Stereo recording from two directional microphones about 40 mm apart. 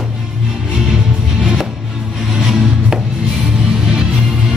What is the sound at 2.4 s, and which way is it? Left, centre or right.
Music, centre.